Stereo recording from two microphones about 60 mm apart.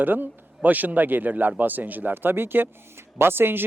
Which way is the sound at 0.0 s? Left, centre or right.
Right.